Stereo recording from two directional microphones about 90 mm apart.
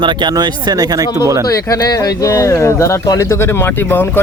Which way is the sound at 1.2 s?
35° right (ahead or behind).